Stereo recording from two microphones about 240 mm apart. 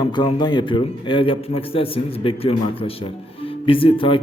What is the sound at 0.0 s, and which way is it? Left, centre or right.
A man's voice, centre.